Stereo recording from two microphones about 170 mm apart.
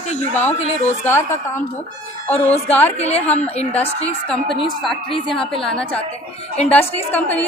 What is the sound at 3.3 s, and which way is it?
Speech, 40° left (ahead or behind).